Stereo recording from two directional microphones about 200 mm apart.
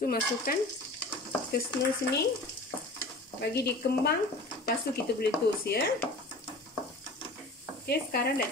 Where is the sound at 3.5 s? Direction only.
55° left (ahead or behind).